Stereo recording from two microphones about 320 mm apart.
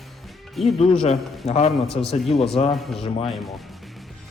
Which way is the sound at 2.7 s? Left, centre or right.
Centre.